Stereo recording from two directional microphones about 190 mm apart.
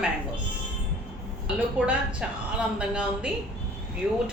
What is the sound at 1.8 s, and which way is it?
Speech, 5° right (ahead or behind).